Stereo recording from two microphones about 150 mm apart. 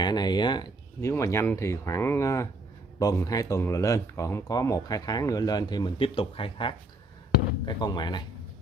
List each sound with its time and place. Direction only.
0.0 s speech: 25° left (ahead or behind)
1.1 s speech: 20° left (ahead or behind)